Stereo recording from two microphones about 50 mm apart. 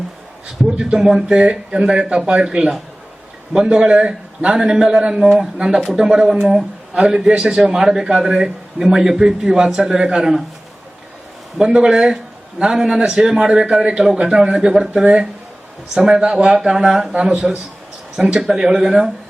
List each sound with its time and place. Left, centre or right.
0.8 s a man's voice: centre
11.5 s a man's voice: centre